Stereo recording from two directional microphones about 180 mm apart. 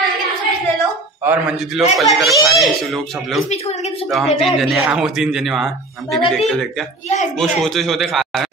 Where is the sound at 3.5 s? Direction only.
40° left (ahead or behind).